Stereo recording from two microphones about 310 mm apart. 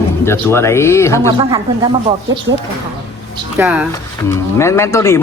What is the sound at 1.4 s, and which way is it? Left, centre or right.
Speech, centre.